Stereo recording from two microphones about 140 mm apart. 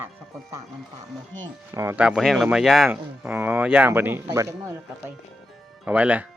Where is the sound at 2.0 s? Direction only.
5° right (ahead or behind).